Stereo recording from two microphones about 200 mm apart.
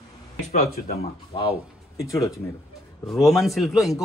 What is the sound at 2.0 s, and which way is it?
Speech, 15° left (ahead or behind).